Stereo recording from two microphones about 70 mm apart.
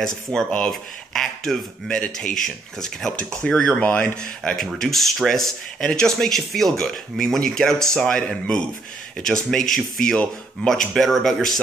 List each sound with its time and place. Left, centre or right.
0.0 s speech: centre
4.6 s speech: centre